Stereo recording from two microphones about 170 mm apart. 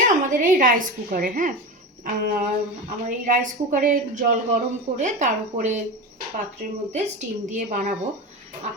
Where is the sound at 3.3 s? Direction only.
50° right (ahead or behind).